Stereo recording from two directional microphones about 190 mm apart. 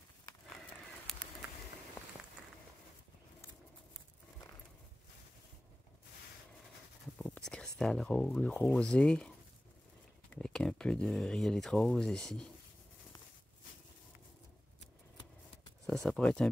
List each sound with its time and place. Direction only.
7.2 s speech: 5° left (ahead or behind)
10.3 s speech: 5° left (ahead or behind)
15.9 s speech: 5° left (ahead or behind)